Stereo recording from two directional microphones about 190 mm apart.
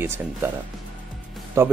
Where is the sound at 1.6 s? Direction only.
15° right (ahead or behind).